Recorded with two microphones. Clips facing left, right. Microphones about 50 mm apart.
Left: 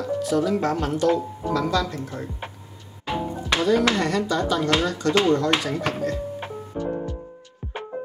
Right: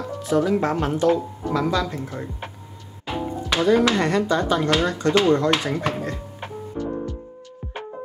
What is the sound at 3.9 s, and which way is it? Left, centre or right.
Speech, right.